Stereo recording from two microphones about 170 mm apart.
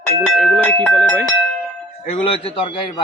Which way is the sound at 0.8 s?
5° left (ahead or behind).